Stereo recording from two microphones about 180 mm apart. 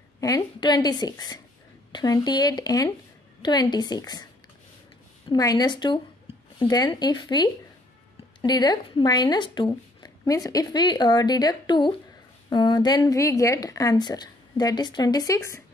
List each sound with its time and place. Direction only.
0.2 s a woman's voice: 20° left (ahead or behind)
5.3 s a woman's voice: 20° left (ahead or behind)